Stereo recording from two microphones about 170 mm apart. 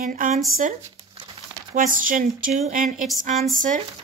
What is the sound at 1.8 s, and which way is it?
A woman's voice, 55° right (ahead or behind).